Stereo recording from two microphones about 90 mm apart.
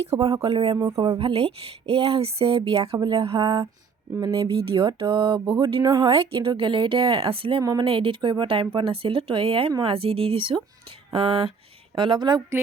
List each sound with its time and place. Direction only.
0.2 s speech: 40° right (ahead or behind)
0.4 s speech: 90° right
0.7 s speech: 40° right (ahead or behind)
1.2 s speech: 90° right
3.0 s speech: 70° right (ahead or behind)
4.3 s mantra: 90° right; by 5.5 s 70° right (ahead or behind)
5.8 s speech: 45° right (ahead or behind)
6.1 s speech: 90° right
6.6 s speech: 70° right (ahead or behind); by 7.6 s 90° right
7.6 s speech: 40° right (ahead or behind)
7.9 s mantra: 85° right
8.7 s speech: 85° right
11.9 s a woman's voice: 65° right (ahead or behind)